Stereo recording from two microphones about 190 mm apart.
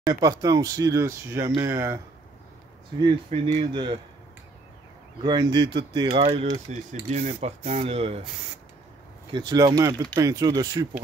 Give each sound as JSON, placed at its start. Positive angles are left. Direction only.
{"t": 0.0, "sound": "speech", "side_deg": -20}
{"t": 3.4, "sound": "speech", "side_deg": -25}
{"t": 5.2, "sound": "speech", "side_deg": -20}
{"t": 9.3, "sound": "speech", "side_deg": -20}